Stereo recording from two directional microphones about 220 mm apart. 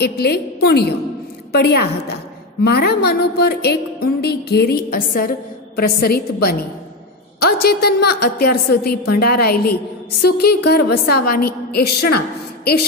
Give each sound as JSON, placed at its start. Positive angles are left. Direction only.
{"t": 0.0, "sound": "a woman's voice", "side_deg": 45}
{"t": 7.6, "sound": "a woman's voice", "side_deg": 45}